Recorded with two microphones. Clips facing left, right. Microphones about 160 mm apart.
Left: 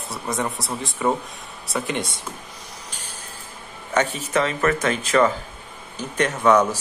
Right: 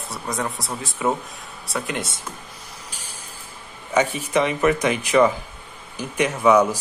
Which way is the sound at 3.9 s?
10° right (ahead or behind).